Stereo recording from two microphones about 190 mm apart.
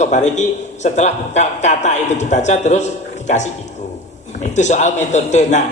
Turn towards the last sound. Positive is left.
turn(degrees=40)  # may be behind; listen again after turning